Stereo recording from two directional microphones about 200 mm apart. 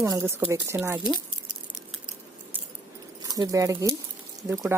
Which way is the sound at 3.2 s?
20° right (ahead or behind).